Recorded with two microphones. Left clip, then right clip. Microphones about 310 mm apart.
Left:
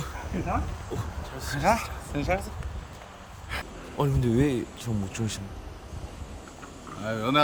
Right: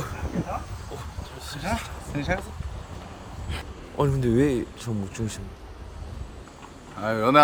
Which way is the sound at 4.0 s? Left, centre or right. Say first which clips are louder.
Right 3 dB; centre.